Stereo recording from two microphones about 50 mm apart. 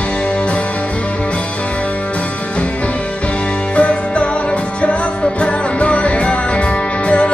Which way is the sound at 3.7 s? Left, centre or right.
Left.